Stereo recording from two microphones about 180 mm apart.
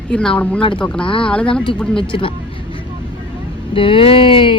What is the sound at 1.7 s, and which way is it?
Speech, 5° left (ahead or behind).